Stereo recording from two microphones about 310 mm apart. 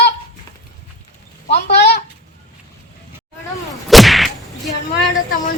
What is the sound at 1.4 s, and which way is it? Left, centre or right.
Speech, left.